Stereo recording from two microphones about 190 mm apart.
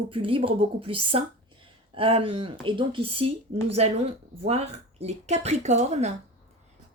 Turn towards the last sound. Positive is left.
turn(degrees=-35)  # may be behind; listen again after turning